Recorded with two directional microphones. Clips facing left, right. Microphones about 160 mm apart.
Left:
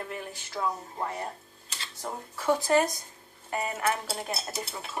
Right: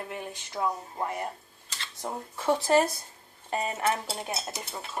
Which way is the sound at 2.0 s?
25° right (ahead or behind).